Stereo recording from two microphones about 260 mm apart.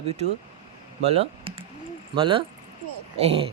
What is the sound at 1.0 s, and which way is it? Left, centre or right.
Speech, right.